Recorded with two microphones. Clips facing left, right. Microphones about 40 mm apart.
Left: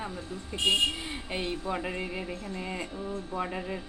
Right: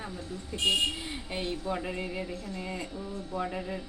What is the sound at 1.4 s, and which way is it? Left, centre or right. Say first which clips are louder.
Speech: even; left.